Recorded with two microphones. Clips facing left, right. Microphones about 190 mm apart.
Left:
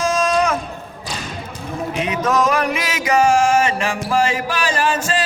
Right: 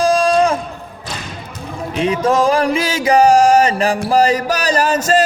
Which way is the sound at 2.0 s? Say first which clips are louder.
Right 5 dB; 30° right (ahead or behind).